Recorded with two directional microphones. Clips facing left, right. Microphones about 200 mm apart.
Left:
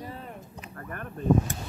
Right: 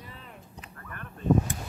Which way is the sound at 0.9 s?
45° left (ahead or behind).